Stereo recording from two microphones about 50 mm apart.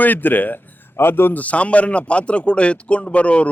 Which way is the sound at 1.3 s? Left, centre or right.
Left.